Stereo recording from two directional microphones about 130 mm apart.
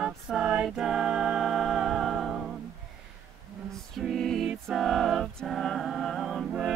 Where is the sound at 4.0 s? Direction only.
Centre (ahead or behind).